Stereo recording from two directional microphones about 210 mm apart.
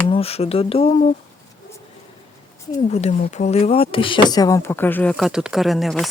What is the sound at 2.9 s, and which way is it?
Speech, 30° left (ahead or behind).